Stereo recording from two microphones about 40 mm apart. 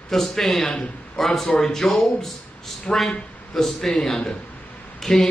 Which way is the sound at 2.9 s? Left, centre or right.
Left.